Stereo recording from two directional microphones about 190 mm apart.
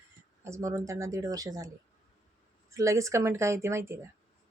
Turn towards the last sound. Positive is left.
turn(degrees=-15)  # may be behind; listen again after turning